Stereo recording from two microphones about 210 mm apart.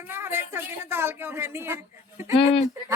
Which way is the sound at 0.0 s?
10° right (ahead or behind).